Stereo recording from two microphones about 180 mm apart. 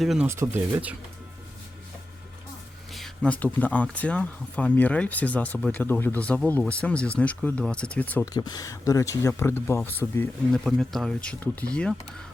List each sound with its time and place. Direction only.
0.0 s speech: centre (ahead or behind)
0.3 s speech: 15° right (ahead or behind)
2.9 s speech: 5° left (ahead or behind)
8.3 s speech: 20° left (ahead or behind); by 11.9 s 5° left (ahead or behind)